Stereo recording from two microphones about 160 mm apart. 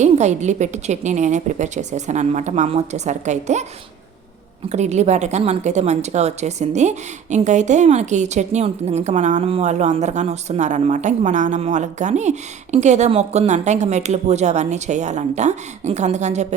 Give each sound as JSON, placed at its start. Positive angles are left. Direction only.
{"t": 0.0, "sound": "a woman's voice", "side_deg": -45}
{"t": 4.7, "sound": "a woman's voice", "side_deg": -45}